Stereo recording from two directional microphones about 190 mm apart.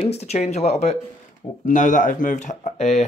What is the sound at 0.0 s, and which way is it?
Speech, 35° left (ahead or behind).